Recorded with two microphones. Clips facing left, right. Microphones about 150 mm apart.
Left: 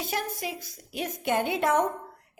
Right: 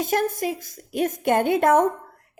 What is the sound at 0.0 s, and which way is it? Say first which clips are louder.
A woman's voice: right 9 dB; 50° right (ahead or behind).